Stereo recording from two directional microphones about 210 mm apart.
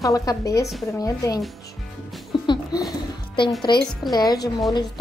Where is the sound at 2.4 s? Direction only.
20° left (ahead or behind).